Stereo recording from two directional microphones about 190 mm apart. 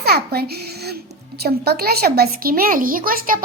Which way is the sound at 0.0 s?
55° right (ahead or behind).